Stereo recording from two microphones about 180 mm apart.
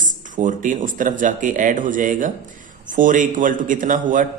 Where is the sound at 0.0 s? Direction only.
45° right (ahead or behind).